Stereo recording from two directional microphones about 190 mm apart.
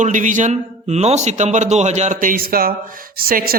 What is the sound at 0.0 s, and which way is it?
A man's voice, 40° right (ahead or behind).